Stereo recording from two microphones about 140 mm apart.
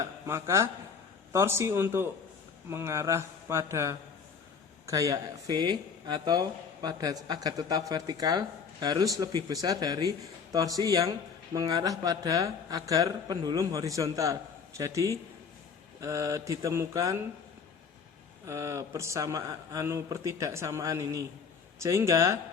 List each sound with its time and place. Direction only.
0.0 s speech: 20° right (ahead or behind)
18.4 s speech: 20° right (ahead or behind)